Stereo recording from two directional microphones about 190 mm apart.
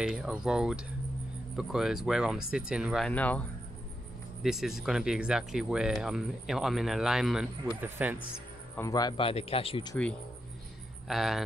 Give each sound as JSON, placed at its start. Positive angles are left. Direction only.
{"t": 0.0, "sound": "speech", "side_deg": -5}
{"t": 3.1, "sound": "speech", "side_deg": 10}
{"t": 8.7, "sound": "speech", "side_deg": 20}
{"t": 11.1, "sound": "speech", "side_deg": 0}